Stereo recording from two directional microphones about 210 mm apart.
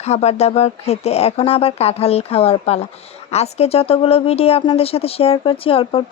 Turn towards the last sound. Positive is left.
turn(degrees=25)  # may be behind; listen again after turning